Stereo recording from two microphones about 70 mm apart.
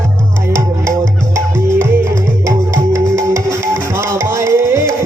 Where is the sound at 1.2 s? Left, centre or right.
Right.